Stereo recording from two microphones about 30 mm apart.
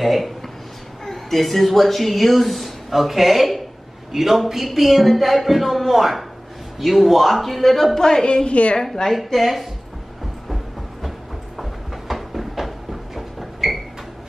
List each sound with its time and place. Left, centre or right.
0.0 s a man's voice: centre
8.0 s a woman's voice: left
8.3 s a woman's voice: left
9.0 s speech: centre
10.5 s train: centre
12.1 s a sound: centre